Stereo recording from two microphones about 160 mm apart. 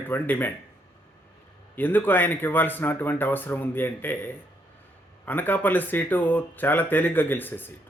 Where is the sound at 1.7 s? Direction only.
10° left (ahead or behind).